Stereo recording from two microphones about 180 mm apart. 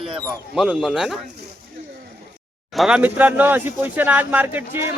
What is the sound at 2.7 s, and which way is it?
Speech, centre (ahead or behind).